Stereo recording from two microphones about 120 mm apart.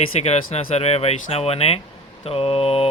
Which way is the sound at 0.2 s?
65° left (ahead or behind).